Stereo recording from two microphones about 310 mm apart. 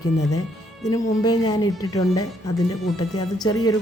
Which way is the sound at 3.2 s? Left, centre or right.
Centre.